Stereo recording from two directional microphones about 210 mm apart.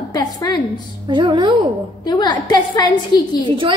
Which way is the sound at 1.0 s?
20° right (ahead or behind).